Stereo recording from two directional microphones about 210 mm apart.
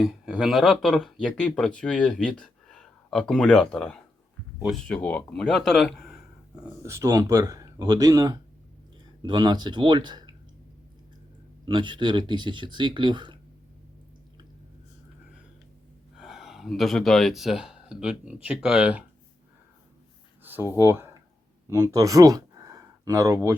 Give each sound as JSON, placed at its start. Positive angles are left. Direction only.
{"t": 0.0, "sound": "speech", "side_deg": 0}
{"t": 6.6, "sound": "speech", "side_deg": -15}
{"t": 11.6, "sound": "speech", "side_deg": -20}
{"t": 16.1, "sound": "speech", "side_deg": 0}
{"t": 20.4, "sound": "a sound", "side_deg": -10}
{"t": 20.7, "sound": "speech", "side_deg": -10}